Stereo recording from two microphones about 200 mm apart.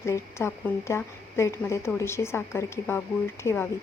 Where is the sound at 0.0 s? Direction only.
15° left (ahead or behind).